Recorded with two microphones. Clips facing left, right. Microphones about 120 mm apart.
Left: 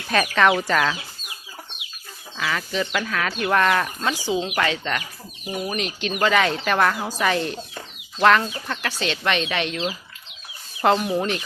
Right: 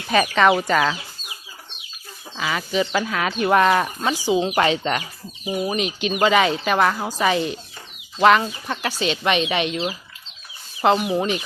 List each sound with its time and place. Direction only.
0.1 s speech: 5° right (ahead or behind)
2.4 s speech: 15° right (ahead or behind)
4.4 s speech: 30° right (ahead or behind); by 9.7 s 15° right (ahead or behind)
10.8 s speech: 5° right (ahead or behind)